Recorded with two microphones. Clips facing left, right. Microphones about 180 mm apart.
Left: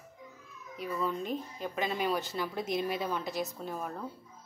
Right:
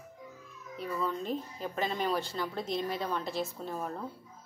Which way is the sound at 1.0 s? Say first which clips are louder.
Even; 10° left (ahead or behind).